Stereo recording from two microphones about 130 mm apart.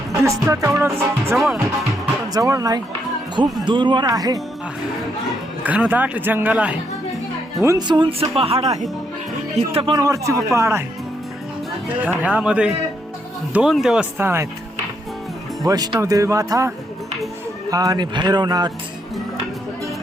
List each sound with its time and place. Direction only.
0.1 s speech: 25° right (ahead or behind)
2.3 s speech: 25° right (ahead or behind)
5.6 s speech: 10° right (ahead or behind)
7.6 s speech: 25° right (ahead or behind)
7.9 s speech: 35° right (ahead or behind)
9.9 s speech: 25° right (ahead or behind)
11.9 s speech: 10° right (ahead or behind)
14.2 s speech: 20° right (ahead or behind)
15.6 s speech: 30° right (ahead or behind)